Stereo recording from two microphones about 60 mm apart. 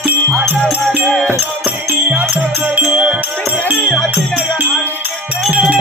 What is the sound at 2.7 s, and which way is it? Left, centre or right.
Music, centre.